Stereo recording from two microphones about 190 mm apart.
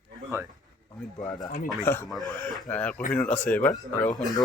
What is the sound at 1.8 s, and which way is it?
Speech, 10° left (ahead or behind).